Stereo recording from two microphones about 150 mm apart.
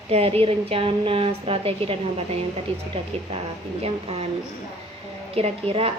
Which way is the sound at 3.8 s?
45° right (ahead or behind).